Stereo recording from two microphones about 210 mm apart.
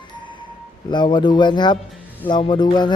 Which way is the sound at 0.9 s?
20° left (ahead or behind).